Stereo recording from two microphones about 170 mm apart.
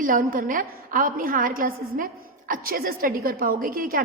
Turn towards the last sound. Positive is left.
turn(degrees=-55)  # may be behind; listen again after turning